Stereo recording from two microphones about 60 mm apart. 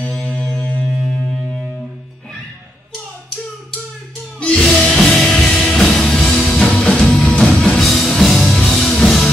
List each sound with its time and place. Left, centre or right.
0.5 s music: left
4.6 s music: centre
6.7 s music: centre
7.8 s music: centre